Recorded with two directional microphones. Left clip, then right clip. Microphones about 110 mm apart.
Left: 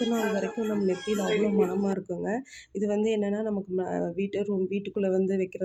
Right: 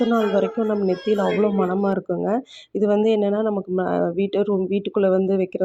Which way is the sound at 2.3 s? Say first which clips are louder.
Right 8 dB; 35° right (ahead or behind).